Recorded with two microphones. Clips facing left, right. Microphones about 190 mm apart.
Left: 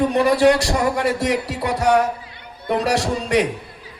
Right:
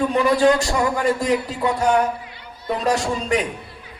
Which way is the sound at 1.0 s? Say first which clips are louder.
Even; 75° left (ahead or behind).